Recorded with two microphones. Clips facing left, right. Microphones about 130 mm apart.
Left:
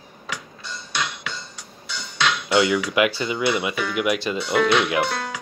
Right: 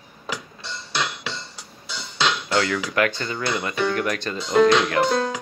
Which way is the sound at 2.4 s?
15° left (ahead or behind).